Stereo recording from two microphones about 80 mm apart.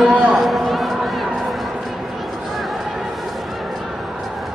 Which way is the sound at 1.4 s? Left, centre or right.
Centre.